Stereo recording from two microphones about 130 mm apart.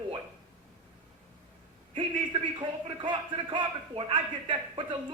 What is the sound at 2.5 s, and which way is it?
A man's voice, 40° right (ahead or behind).